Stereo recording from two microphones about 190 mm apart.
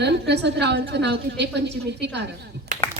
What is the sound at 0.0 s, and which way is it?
A woman's voice, 65° right (ahead or behind).